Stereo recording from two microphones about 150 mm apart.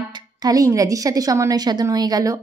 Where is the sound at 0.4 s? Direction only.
25° right (ahead or behind).